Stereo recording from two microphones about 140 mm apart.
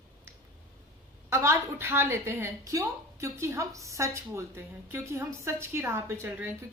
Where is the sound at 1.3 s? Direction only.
20° right (ahead or behind).